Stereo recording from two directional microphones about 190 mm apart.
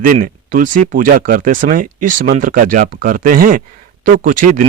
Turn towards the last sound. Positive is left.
turn(degrees=-45)  # may be behind; listen again after turning